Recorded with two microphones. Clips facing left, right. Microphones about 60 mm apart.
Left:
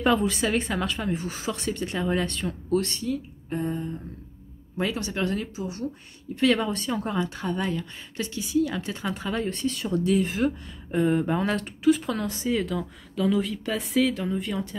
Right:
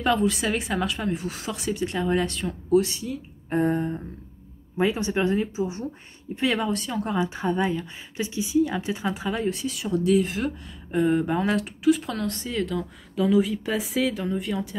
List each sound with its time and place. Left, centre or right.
0.0 s speech: centre
3.4 s a sound: right
4.7 s speech: right
6.3 s speech: centre
7.2 s speech: centre